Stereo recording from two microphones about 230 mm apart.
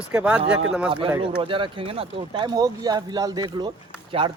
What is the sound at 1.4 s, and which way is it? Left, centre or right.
Speech, right.